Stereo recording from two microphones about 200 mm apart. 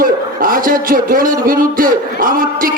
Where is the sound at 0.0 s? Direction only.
45° right (ahead or behind).